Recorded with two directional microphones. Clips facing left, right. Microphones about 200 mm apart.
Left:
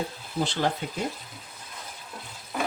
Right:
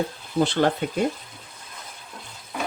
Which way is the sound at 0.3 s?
60° right (ahead or behind).